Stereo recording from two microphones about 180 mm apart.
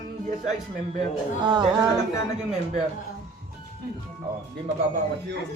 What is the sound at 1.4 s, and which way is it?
Speech, 25° right (ahead or behind).